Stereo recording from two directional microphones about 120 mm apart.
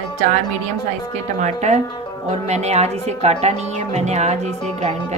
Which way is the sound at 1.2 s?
75° right (ahead or behind).